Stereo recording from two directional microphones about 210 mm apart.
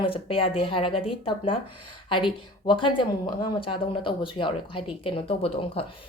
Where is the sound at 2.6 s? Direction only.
25° left (ahead or behind).